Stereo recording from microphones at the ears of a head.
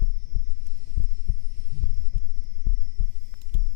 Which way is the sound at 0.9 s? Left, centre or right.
Left.